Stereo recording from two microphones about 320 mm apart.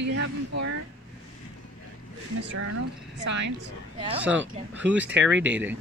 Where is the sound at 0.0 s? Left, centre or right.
Right.